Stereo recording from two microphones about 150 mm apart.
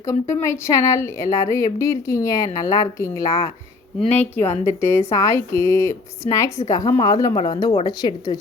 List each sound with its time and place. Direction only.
0.0 s speech: 20° left (ahead or behind)